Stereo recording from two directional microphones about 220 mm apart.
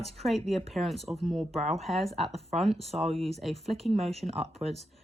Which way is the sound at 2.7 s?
30° right (ahead or behind).